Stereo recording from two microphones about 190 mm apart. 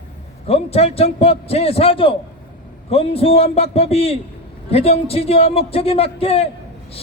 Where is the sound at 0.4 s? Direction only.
30° left (ahead or behind).